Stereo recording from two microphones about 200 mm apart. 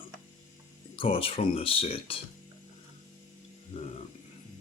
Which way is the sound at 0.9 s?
30° left (ahead or behind).